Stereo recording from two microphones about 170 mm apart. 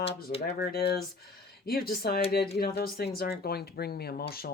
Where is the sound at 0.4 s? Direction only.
70° left (ahead or behind).